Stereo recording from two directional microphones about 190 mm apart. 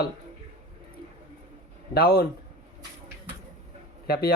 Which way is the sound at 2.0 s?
55° left (ahead or behind).